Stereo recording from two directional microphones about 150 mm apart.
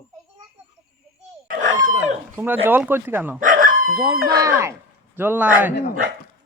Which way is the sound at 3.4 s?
65° right (ahead or behind).